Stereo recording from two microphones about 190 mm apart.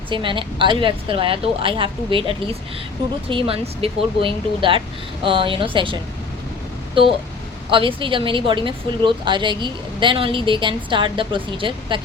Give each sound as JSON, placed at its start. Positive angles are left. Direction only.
{"t": 0.1, "sound": "speech", "side_deg": -25}